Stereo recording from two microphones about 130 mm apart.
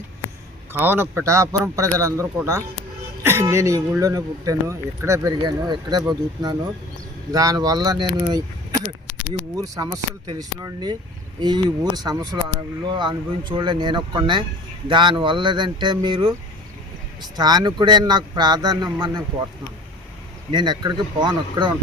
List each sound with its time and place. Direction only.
0.7 s a man's voice: 15° right (ahead or behind); by 19.2 s 35° right (ahead or behind)
20.5 s speech: 35° right (ahead or behind)